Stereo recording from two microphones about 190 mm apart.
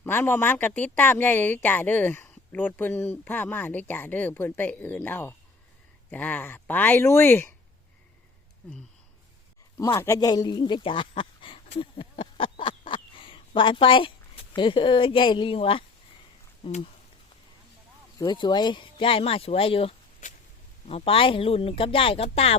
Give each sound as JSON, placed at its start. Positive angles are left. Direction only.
{"t": 0.0, "sound": "speech", "side_deg": 10}
{"t": 9.7, "sound": "a sound", "side_deg": 15}
{"t": 14.5, "sound": "speech", "side_deg": 25}
{"t": 18.2, "sound": "speech", "side_deg": 20}
{"t": 20.2, "sound": "a sound", "side_deg": 40}
{"t": 20.8, "sound": "speech", "side_deg": 30}